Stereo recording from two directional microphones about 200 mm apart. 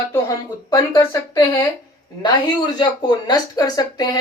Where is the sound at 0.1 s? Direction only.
15° left (ahead or behind).